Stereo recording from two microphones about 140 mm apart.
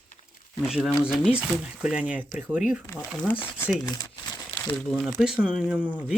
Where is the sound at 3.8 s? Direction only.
30° left (ahead or behind).